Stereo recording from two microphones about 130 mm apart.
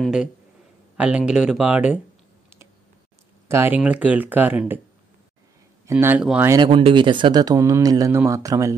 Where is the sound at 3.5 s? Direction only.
15° right (ahead or behind).